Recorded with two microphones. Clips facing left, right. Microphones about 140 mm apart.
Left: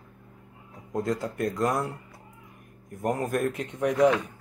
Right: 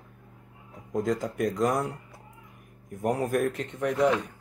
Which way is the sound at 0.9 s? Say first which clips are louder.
Right 1 dB; centre (ahead or behind).